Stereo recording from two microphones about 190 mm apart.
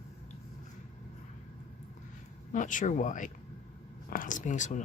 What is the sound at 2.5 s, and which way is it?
Speech, 45° left (ahead or behind).